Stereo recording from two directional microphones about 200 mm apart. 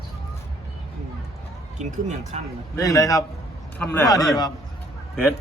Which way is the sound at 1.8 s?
35° right (ahead or behind).